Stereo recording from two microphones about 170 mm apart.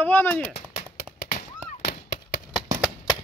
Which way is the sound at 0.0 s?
10° left (ahead or behind).